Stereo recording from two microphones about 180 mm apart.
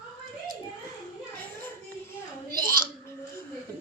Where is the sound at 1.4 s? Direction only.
10° left (ahead or behind).